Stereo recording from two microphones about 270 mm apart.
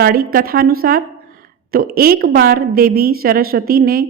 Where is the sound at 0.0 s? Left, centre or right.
Right.